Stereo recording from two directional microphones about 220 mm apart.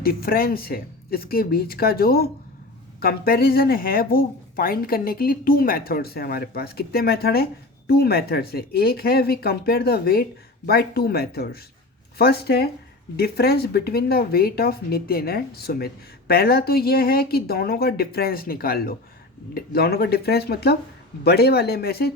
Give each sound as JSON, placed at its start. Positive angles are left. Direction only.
{"t": 0.0, "sound": "a woman's voice", "side_deg": 45}